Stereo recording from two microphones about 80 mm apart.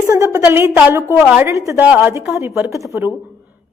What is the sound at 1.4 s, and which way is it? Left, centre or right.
A woman's voice, right.